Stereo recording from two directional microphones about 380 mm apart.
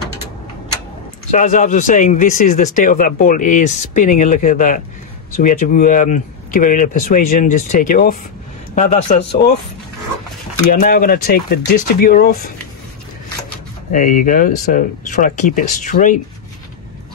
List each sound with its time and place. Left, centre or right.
1.3 s speech: centre
10.7 s speech: left
13.9 s speech: centre